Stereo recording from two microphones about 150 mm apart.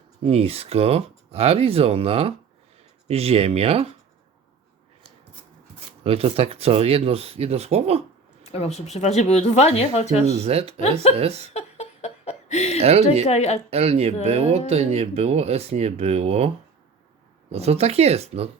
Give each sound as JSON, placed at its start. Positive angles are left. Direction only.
{"t": 0.2, "sound": "speech", "side_deg": -45}
{"t": 6.0, "sound": "speech", "side_deg": -40}
{"t": 8.4, "sound": "speech", "side_deg": 45}
{"t": 10.4, "sound": "speech", "side_deg": -45}
{"t": 11.5, "sound": "a sound", "side_deg": 45}
{"t": 12.8, "sound": "speech", "side_deg": -45}
{"t": 13.2, "sound": "speech", "side_deg": 45}
{"t": 13.7, "sound": "speech", "side_deg": -45}
{"t": 17.5, "sound": "speech", "side_deg": -45}